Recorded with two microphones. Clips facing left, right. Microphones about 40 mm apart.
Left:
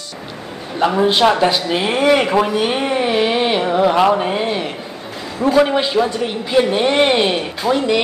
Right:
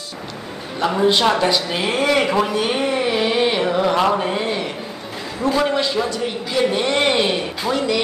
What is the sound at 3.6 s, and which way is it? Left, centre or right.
A woman's voice, centre.